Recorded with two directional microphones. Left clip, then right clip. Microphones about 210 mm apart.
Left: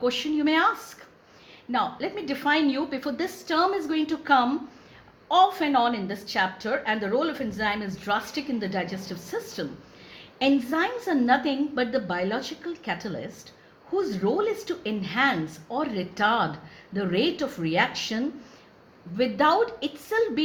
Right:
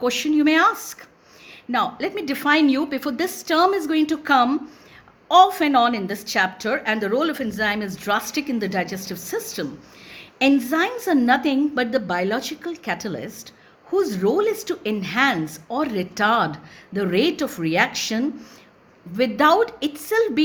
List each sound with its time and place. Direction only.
0.0 s a woman's voice: 50° right (ahead or behind)